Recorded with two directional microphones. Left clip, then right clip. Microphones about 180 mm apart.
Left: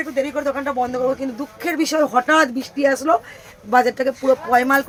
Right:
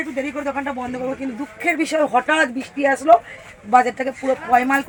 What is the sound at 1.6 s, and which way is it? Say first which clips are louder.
A man's voice: even; 15° left (ahead or behind).